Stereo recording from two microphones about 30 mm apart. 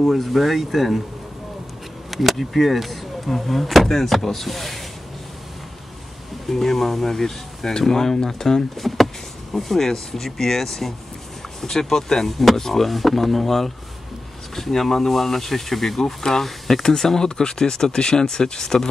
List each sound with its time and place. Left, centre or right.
0.2 s speech: centre
2.0 s speech: centre
6.4 s speech: centre
8.7 s speech: centre
12.3 s speech: centre
16.2 s speech: centre